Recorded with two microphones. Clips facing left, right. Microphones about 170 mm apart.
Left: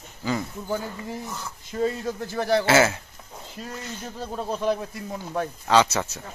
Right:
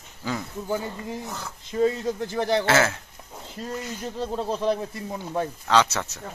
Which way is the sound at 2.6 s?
10° left (ahead or behind).